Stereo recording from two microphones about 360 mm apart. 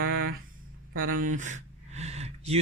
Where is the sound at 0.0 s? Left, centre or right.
Right.